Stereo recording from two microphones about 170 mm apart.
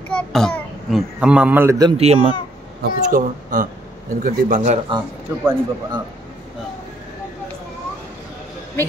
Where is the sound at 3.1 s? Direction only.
55° right (ahead or behind).